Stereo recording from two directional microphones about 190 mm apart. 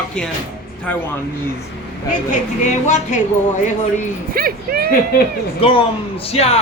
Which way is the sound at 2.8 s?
40° left (ahead or behind).